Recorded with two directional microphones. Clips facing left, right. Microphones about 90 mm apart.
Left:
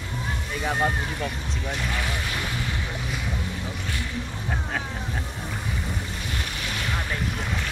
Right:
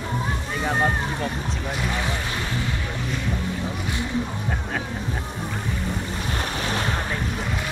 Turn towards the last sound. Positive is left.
turn(degrees=-35)  # may be behind; listen again after turning